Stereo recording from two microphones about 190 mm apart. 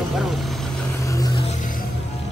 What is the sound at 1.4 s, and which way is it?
Music, 40° left (ahead or behind).